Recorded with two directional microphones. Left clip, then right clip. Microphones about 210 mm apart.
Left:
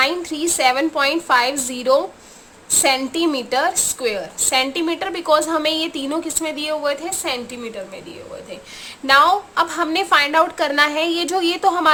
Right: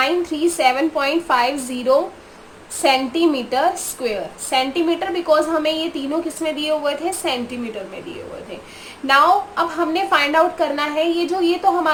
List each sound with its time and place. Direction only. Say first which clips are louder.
0.0 s a woman's voice: right 1 dB; 25° left (ahead or behind)
9.0 s a woman's voice: even; 30° left (ahead or behind)